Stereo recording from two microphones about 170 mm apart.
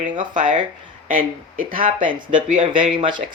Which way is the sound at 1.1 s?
55° right (ahead or behind).